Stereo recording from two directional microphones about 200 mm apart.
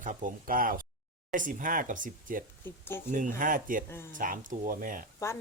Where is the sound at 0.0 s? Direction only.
40° right (ahead or behind).